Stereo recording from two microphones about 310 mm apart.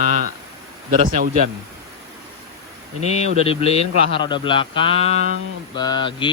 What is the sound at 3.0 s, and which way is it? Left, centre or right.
Speech, left.